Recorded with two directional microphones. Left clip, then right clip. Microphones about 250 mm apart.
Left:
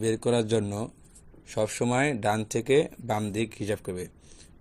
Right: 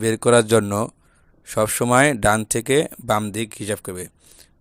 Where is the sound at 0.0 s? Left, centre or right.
Right.